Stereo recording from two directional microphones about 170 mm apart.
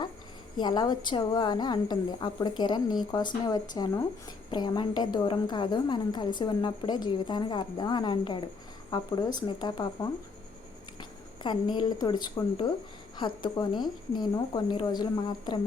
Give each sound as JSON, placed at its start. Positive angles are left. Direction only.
{"t": 0.5, "sound": "a woman's voice", "side_deg": 25}
{"t": 11.4, "sound": "a woman's voice", "side_deg": 25}